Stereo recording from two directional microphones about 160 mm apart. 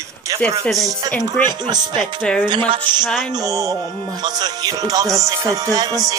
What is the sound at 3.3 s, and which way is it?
Speech, 20° right (ahead or behind).